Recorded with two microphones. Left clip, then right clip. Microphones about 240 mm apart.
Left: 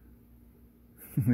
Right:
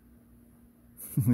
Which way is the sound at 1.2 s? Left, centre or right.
Centre.